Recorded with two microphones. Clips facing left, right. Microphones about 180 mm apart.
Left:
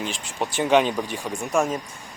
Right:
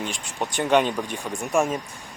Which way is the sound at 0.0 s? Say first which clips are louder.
Left 1 dB; 5° left (ahead or behind).